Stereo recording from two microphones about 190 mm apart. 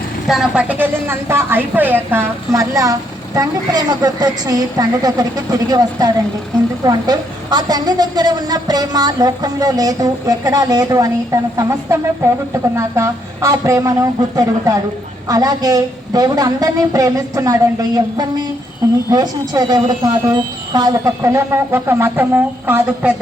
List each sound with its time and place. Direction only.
0.3 s a woman's voice: 5° right (ahead or behind)